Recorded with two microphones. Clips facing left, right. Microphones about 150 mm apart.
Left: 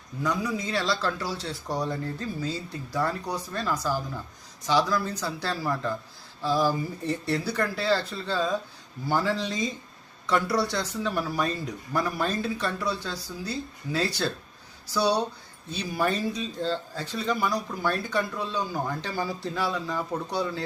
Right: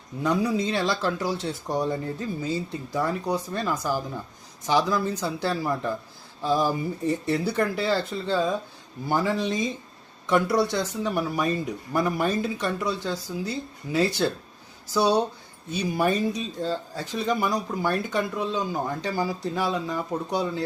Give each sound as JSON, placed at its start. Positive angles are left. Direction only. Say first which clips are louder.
{"t": 0.2, "sound": "speech", "louder": "right 5 dB", "side_deg": -25}